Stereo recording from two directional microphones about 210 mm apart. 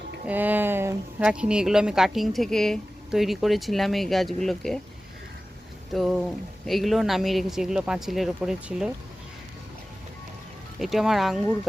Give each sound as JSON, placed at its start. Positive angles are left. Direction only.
{"t": 0.3, "sound": "a woman's voice", "side_deg": -10}
{"t": 5.9, "sound": "a woman's voice", "side_deg": 0}
{"t": 10.8, "sound": "a woman's voice", "side_deg": 0}